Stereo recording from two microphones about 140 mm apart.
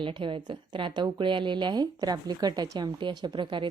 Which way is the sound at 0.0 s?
35° right (ahead or behind).